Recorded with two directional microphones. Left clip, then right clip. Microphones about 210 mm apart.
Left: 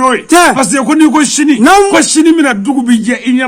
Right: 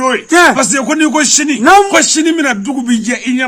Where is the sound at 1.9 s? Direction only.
Centre (ahead or behind).